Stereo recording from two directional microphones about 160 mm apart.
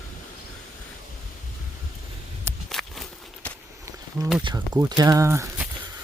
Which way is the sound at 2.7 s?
Centre (ahead or behind).